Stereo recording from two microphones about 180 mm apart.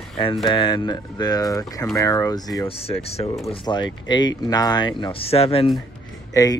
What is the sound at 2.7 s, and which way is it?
Speech, 35° left (ahead or behind).